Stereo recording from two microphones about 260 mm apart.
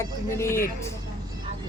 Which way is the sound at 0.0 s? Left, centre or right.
Centre.